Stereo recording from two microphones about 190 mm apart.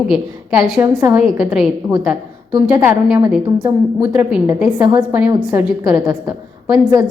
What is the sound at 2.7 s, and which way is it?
A woman's voice, 10° right (ahead or behind).